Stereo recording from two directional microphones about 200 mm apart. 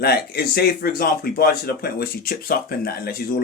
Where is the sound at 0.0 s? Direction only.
50° left (ahead or behind).